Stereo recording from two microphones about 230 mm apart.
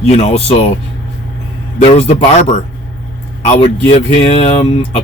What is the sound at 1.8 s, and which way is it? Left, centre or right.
Speech, left.